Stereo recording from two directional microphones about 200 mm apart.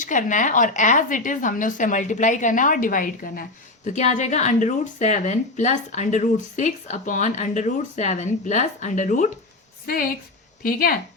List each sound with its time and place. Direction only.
0.0 s a woman's voice: 40° left (ahead or behind)